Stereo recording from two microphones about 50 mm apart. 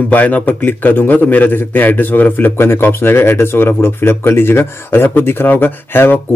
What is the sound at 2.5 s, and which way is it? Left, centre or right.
Speech, left.